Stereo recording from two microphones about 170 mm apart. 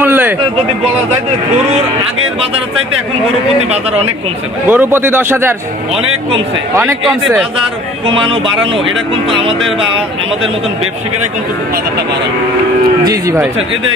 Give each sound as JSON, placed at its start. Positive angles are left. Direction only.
{"t": 0.0, "sound": "a sound", "side_deg": -10}
{"t": 4.6, "sound": "a man's voice", "side_deg": -10}
{"t": 7.1, "sound": "speech", "side_deg": 0}
{"t": 13.0, "sound": "speech", "side_deg": -20}